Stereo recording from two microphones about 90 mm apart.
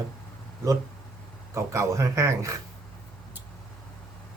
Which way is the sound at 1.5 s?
35° right (ahead or behind).